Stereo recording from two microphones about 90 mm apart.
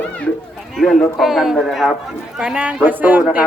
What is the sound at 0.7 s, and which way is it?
A woman's voice, 5° left (ahead or behind).